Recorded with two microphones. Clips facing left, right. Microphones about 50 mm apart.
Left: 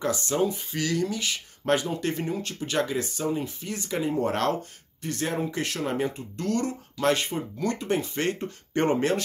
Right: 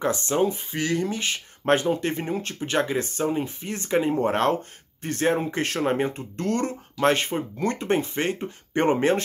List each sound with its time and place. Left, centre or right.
0.0 s speech: right